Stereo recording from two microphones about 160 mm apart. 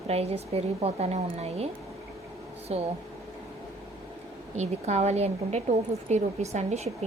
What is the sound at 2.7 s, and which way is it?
Speech, 40° right (ahead or behind).